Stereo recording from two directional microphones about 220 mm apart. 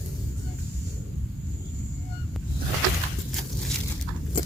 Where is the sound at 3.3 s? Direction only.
Centre (ahead or behind).